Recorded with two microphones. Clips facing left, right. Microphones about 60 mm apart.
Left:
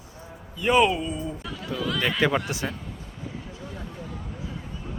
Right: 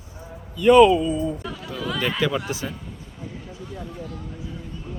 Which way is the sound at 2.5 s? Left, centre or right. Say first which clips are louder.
Right 1 dB; left.